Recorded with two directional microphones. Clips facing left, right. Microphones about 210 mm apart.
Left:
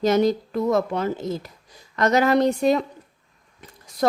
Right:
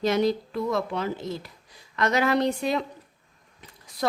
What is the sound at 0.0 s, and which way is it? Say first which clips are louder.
A woman's voice: left 4 dB; 40° left (ahead or behind).